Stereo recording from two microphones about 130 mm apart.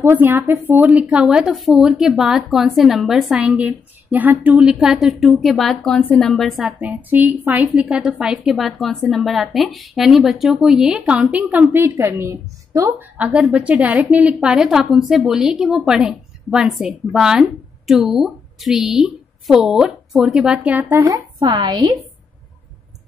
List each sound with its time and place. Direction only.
0.0 s a woman's voice: 15° right (ahead or behind); by 6.7 s centre (ahead or behind)
6.8 s a woman's voice: 15° right (ahead or behind)
13.2 s a woman's voice: 10° right (ahead or behind)
21.0 s speech: 30° right (ahead or behind)